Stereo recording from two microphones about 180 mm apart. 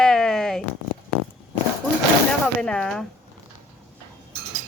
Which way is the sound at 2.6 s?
5° left (ahead or behind).